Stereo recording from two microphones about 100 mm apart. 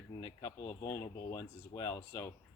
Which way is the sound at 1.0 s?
25° left (ahead or behind).